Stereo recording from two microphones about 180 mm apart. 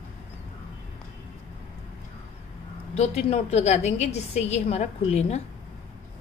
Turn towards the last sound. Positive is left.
turn(degrees=40)  # may be behind; listen again after turning